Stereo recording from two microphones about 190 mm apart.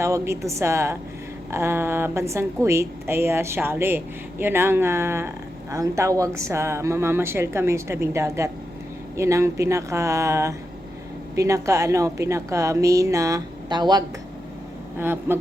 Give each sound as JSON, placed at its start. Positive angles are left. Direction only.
{"t": 0.0, "sound": "a woman's voice", "side_deg": -15}
{"t": 14.9, "sound": "a woman's voice", "side_deg": -10}